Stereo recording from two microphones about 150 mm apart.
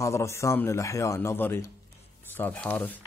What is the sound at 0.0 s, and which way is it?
Speech, 20° left (ahead or behind).